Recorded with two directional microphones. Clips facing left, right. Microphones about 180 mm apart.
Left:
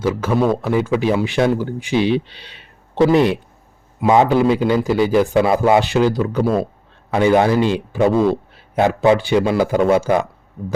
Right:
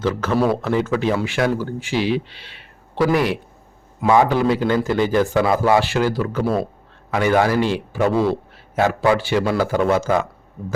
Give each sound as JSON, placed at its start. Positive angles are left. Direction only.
{"t": 0.0, "sound": "a man's voice", "side_deg": 10}
{"t": 2.6, "sound": "a sound", "side_deg": 20}
{"t": 4.0, "sound": "a man's voice", "side_deg": 20}